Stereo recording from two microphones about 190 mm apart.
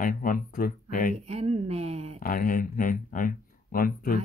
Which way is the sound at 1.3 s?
35° right (ahead or behind).